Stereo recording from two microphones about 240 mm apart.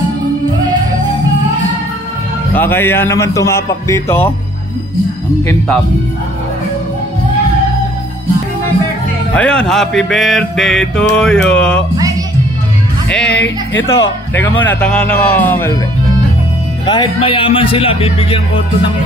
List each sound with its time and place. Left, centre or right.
2.5 s a man's voice: centre
9.3 s mantra: centre
13.1 s mantra: centre
13.8 s a man's voice: centre
16.8 s speech: centre